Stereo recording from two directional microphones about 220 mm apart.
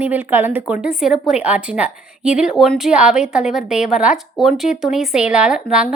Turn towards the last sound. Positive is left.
turn(degrees=-5)  # may be behind; listen again after turning